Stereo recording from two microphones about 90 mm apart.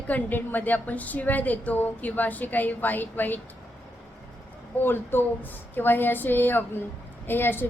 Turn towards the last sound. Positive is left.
turn(degrees=25)  # may be behind; listen again after turning